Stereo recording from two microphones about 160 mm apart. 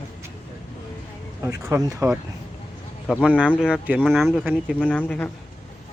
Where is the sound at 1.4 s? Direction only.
15° right (ahead or behind).